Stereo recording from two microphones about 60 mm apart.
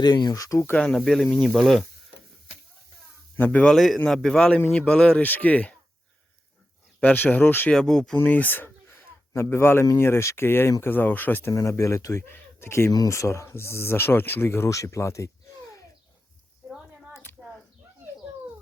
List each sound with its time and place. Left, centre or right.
0.1 s speech: left
0.8 s speech: centre
3.3 s speech: left
3.8 s speech: centre
5.2 s speech: left
7.0 s speech: left
7.7 s speech: centre
8.1 s a man's voice: left
11.5 s speech: left
12.3 s speech: left
14.7 s speech: left
16.6 s a sound: centre